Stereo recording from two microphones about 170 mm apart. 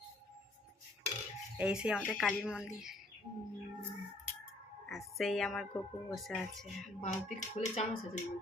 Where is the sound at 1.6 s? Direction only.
5° right (ahead or behind).